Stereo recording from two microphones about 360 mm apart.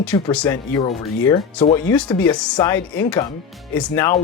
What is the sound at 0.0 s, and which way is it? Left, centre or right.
Speech, centre.